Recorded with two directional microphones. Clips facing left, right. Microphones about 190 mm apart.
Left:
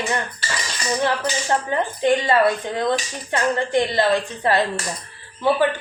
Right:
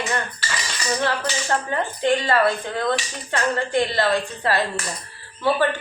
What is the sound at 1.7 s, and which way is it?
Speech, 20° left (ahead or behind).